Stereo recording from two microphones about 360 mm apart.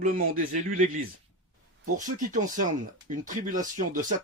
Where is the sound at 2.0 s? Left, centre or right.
Right.